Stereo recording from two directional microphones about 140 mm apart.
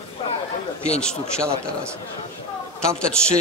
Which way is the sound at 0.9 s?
5° left (ahead or behind).